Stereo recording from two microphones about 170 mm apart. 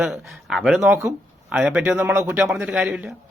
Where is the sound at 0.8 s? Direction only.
15° right (ahead or behind).